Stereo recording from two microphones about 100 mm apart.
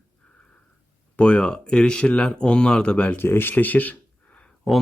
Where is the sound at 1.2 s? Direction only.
10° left (ahead or behind).